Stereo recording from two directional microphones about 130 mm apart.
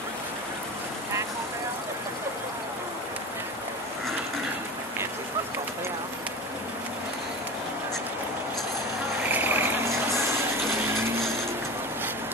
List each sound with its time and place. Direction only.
9.3 s vehicle: 15° right (ahead or behind)